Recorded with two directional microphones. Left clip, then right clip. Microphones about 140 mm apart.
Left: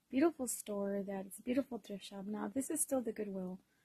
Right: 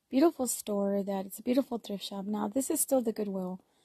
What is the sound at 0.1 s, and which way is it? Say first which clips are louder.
A woman's voice: right 7 dB; 40° right (ahead or behind).